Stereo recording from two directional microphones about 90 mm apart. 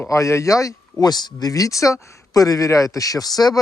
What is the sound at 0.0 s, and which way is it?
Speech, 35° left (ahead or behind).